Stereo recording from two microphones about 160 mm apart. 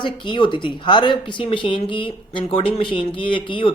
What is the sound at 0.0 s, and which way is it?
Speech, 30° left (ahead or behind).